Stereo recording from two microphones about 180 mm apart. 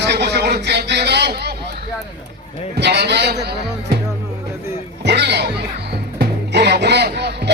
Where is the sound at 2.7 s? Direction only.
70° right (ahead or behind).